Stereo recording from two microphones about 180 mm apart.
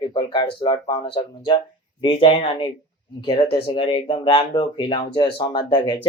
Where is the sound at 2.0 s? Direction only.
30° left (ahead or behind).